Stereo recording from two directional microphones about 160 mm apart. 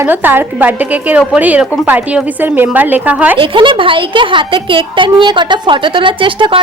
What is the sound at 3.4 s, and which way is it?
A woman's voice, 30° right (ahead or behind).